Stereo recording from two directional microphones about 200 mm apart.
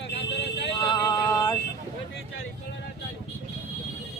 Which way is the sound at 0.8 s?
20° left (ahead or behind).